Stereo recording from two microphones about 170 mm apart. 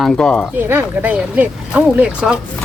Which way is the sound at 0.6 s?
15° right (ahead or behind).